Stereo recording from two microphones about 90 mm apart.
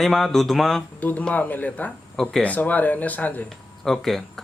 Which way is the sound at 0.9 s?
20° left (ahead or behind).